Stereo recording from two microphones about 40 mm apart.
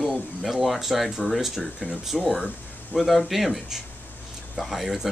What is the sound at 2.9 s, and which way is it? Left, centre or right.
Speech, left.